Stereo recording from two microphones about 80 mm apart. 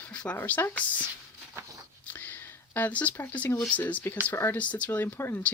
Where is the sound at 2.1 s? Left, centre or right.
Left.